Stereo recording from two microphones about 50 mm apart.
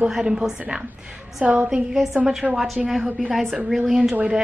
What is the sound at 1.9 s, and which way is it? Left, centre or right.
A woman's voice, centre.